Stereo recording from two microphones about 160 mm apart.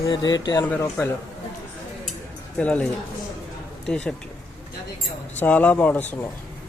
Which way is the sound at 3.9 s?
5° left (ahead or behind).